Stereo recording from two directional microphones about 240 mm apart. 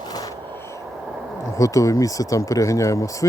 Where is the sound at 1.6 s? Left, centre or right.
Centre.